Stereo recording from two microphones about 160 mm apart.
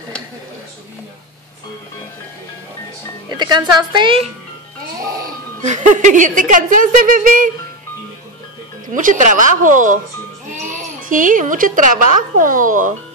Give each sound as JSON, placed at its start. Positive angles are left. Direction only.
{"t": 3.3, "sound": "speech", "side_deg": -25}
{"t": 5.6, "sound": "speech", "side_deg": -50}
{"t": 8.8, "sound": "a woman's voice", "side_deg": -55}